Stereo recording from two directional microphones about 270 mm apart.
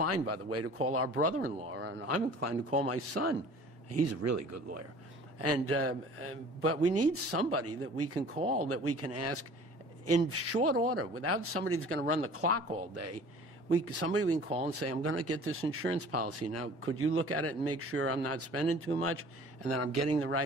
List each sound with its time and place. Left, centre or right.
0.0 s speech: right
1.7 s speech: right
2.0 s speech: right
5.4 s speech: right